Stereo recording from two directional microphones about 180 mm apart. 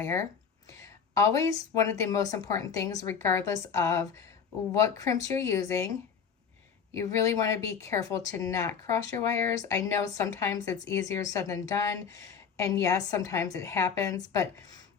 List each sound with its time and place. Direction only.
0.0 s a woman's voice: 15° left (ahead or behind)